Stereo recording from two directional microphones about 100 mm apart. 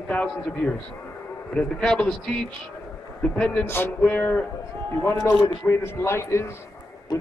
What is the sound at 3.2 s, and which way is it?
Speech, 10° left (ahead or behind).